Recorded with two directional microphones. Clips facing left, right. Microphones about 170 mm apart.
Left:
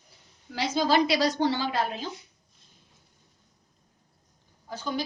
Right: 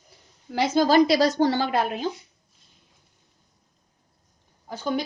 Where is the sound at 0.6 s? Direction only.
50° right (ahead or behind).